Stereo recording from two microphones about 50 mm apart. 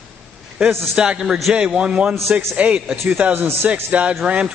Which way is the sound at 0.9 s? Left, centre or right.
Centre.